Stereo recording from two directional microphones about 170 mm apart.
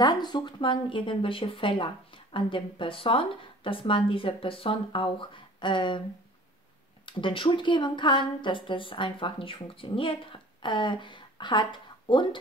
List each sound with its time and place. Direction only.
0.0 s speech: 25° left (ahead or behind)
7.1 s speech: 30° left (ahead or behind)